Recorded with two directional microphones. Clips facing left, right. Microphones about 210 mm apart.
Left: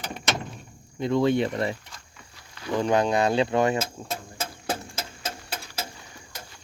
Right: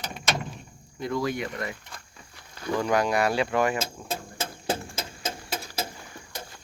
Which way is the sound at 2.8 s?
25° left (ahead or behind).